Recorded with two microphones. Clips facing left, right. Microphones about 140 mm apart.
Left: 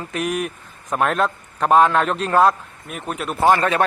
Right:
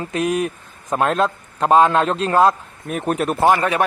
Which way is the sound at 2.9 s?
45° right (ahead or behind).